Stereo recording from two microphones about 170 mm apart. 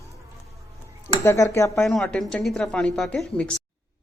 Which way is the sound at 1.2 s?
15° left (ahead or behind).